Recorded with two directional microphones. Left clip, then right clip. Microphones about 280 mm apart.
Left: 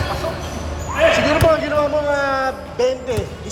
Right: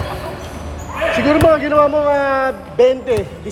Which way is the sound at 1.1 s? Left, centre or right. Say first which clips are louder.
Right 3 dB; right.